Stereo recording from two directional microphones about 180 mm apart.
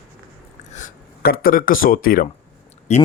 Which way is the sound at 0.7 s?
50° left (ahead or behind).